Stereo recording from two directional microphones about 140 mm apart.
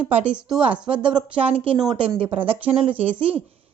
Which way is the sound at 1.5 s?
40° right (ahead or behind).